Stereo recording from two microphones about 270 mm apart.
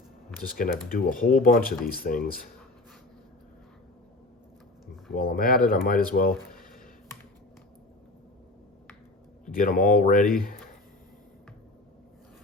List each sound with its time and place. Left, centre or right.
0.3 s speech: left
5.1 s speech: left
9.5 s speech: left